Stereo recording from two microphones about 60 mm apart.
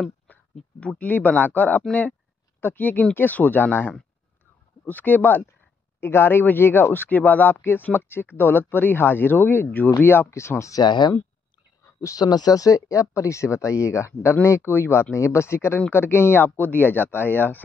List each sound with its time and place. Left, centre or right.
0.3 s a sound: left
0.7 s speech: left
11.8 s speech: left
14.4 s speech: left